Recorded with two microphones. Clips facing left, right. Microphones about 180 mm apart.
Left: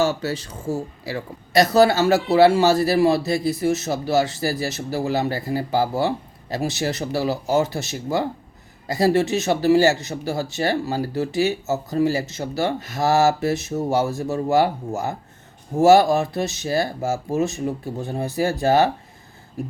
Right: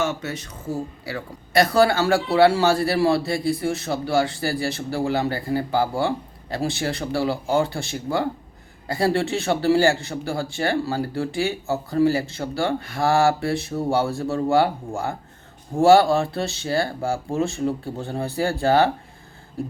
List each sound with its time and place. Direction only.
0.0 s speech: 35° left (ahead or behind)